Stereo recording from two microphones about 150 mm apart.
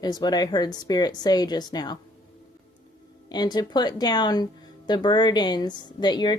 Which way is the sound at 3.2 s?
30° left (ahead or behind).